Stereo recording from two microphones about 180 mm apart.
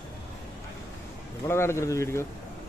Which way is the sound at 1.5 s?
15° left (ahead or behind).